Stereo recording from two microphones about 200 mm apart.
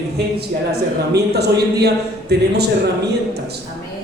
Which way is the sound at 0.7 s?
55° right (ahead or behind).